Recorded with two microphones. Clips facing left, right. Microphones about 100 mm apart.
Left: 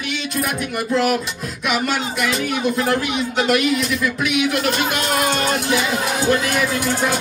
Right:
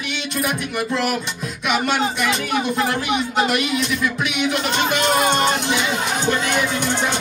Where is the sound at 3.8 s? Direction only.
Centre (ahead or behind).